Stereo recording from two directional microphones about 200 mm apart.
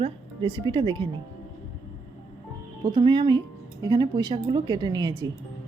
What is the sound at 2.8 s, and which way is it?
A woman's voice, 25° right (ahead or behind).